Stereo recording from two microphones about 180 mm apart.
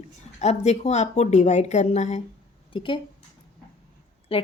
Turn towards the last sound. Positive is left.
turn(degrees=30)  # may be behind; listen again after turning